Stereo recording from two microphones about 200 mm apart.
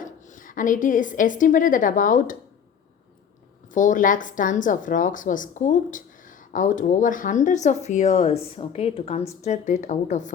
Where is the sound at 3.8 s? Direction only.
40° left (ahead or behind).